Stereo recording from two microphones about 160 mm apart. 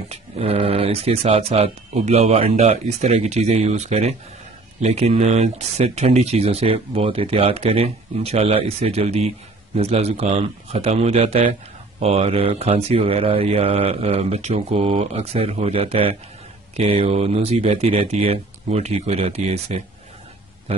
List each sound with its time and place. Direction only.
0.1 s speech: 40° right (ahead or behind)